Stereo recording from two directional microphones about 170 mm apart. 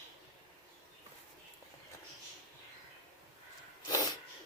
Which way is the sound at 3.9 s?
20° left (ahead or behind).